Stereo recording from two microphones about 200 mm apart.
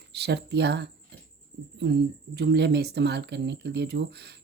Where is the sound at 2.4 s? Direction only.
55° right (ahead or behind).